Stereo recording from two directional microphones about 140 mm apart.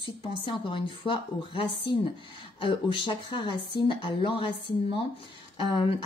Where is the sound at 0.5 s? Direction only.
35° left (ahead or behind).